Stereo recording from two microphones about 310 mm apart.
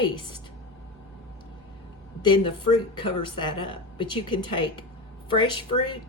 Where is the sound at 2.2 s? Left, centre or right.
Centre.